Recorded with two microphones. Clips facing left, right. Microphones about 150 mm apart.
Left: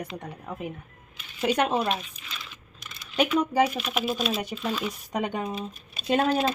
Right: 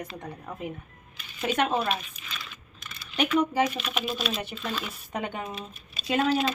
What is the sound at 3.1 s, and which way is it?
Speech, 15° left (ahead or behind).